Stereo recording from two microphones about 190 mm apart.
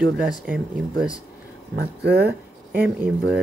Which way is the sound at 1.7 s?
55° right (ahead or behind).